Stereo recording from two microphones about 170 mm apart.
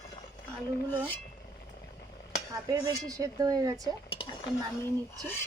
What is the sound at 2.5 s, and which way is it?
Speech, 20° right (ahead or behind).